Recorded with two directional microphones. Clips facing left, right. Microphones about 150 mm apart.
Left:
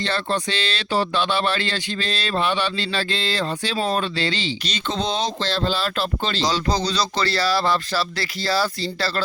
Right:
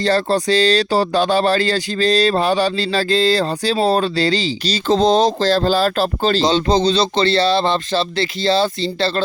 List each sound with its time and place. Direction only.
0.0 s speech: 35° right (ahead or behind)
6.4 s speech: 25° right (ahead or behind)